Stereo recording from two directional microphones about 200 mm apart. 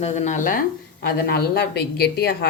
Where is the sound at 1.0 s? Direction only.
50° left (ahead or behind).